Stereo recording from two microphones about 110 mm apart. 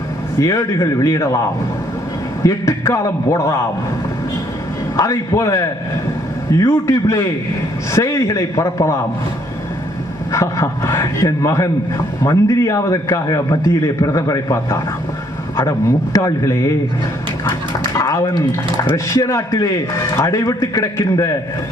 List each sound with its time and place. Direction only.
0.3 s a man's voice: 30° left (ahead or behind)
2.4 s a man's voice: 30° left (ahead or behind)
4.9 s a man's voice: 30° left (ahead or behind)
10.3 s a man's voice: 30° left (ahead or behind)
16.1 s a man's voice: 30° left (ahead or behind)
17.9 s a man's voice: 30° left (ahead or behind)